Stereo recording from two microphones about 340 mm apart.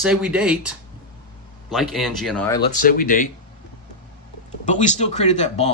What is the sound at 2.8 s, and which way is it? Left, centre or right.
Speech, left.